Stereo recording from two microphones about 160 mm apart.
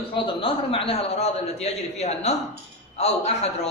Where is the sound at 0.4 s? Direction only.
35° left (ahead or behind).